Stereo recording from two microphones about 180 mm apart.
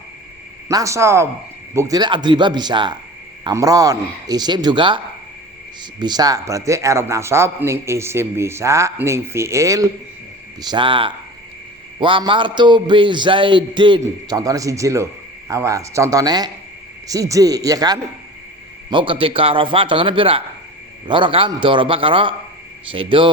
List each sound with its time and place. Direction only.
0.7 s a man's voice: 20° right (ahead or behind)
6.0 s a man's voice: 20° right (ahead or behind)